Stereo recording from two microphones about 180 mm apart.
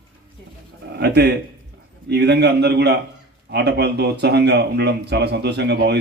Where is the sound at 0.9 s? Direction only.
65° right (ahead or behind).